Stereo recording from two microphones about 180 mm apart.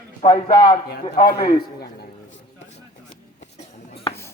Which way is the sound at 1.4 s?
60° left (ahead or behind).